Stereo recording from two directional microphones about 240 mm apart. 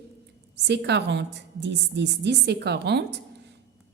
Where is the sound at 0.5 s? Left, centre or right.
Right.